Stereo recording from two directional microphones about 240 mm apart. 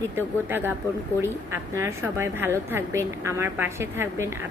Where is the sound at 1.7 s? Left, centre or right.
Centre.